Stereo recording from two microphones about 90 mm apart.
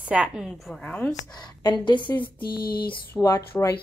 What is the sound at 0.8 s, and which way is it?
Speech, 15° left (ahead or behind).